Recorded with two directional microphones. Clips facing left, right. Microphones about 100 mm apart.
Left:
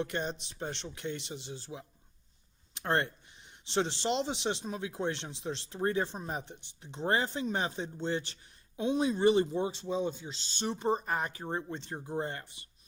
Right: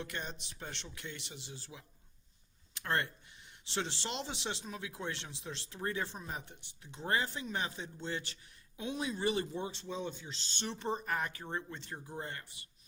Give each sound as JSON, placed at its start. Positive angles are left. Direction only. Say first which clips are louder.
{"t": 0.0, "sound": "speech", "louder": "left 8 dB", "side_deg": 25}